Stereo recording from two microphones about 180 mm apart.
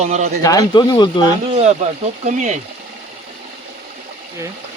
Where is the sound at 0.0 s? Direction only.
40° right (ahead or behind).